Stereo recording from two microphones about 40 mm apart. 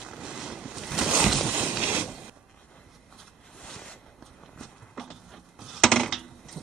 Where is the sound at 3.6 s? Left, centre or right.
Centre.